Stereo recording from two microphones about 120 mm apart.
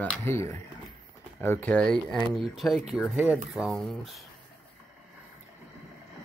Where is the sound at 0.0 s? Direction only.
15° left (ahead or behind); by 4.2 s centre (ahead or behind).